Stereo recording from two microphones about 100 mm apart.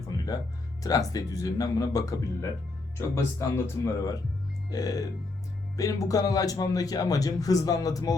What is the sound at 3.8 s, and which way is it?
Speech, 35° left (ahead or behind).